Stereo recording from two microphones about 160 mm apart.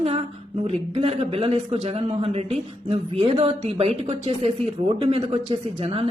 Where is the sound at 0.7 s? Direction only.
40° right (ahead or behind).